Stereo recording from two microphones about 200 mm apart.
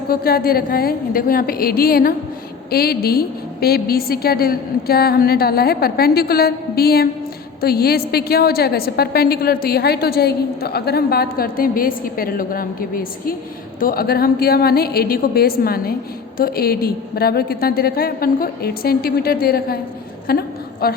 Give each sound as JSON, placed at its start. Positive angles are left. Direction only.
{"t": 0.1, "sound": "a woman's voice", "side_deg": 50}